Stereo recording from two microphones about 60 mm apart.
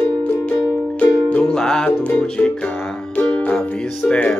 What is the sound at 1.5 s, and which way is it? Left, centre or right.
Music, centre.